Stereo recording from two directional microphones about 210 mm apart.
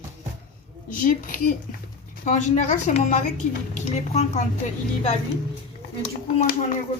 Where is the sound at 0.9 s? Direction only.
40° left (ahead or behind).